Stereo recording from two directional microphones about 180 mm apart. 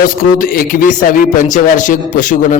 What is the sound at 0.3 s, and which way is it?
A man's voice, 50° left (ahead or behind).